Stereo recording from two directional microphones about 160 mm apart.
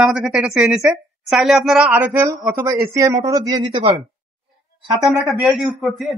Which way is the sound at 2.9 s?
20° right (ahead or behind).